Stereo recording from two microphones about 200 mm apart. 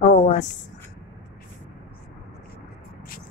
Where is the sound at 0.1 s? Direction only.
35° left (ahead or behind).